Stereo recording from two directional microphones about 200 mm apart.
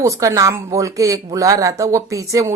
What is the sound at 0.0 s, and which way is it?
Speech, 15° right (ahead or behind).